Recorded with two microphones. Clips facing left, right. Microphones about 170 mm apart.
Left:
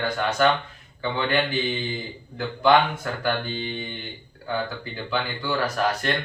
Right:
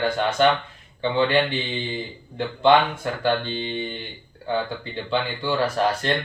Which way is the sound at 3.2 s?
25° right (ahead or behind).